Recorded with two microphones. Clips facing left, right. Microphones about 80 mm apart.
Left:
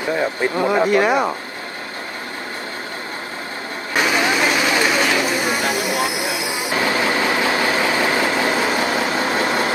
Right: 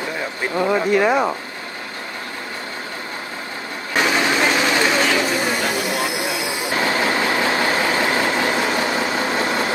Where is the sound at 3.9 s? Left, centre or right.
Centre.